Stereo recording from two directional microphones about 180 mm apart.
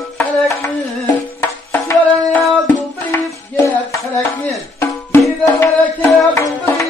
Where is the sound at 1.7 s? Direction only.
10° left (ahead or behind).